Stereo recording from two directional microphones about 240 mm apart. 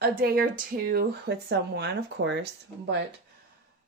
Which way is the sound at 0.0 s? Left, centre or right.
Right.